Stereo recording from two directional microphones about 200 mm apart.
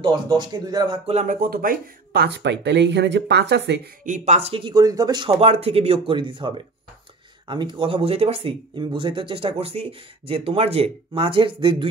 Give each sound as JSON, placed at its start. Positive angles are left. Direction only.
{"t": 0.0, "sound": "speech", "side_deg": -20}
{"t": 4.0, "sound": "speech", "side_deg": -35}